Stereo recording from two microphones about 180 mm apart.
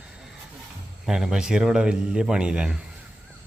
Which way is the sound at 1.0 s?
5° right (ahead or behind).